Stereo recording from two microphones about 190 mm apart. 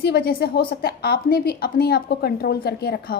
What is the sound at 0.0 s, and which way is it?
A woman's voice, 55° left (ahead or behind).